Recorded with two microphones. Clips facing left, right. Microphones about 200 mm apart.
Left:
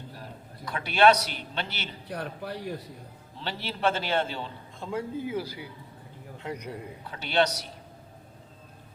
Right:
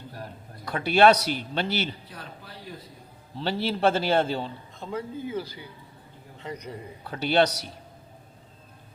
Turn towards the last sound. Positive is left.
turn(degrees=-35)  # may be behind; listen again after turning